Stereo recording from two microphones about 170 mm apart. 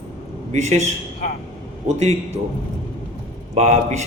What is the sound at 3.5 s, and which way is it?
Speech, 40° right (ahead or behind).